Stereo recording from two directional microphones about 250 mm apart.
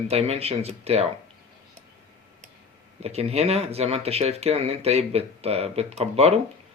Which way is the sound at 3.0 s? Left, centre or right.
Right.